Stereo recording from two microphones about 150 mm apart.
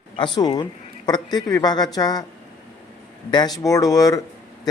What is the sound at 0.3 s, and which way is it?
Speech, 25° left (ahead or behind).